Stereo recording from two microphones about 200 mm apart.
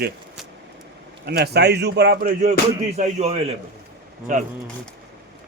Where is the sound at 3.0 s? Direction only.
35° right (ahead or behind).